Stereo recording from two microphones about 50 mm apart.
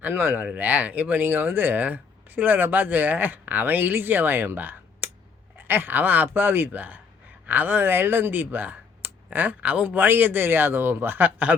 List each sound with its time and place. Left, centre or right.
0.1 s speech: right
0.4 s speech: right
1.2 s speech: right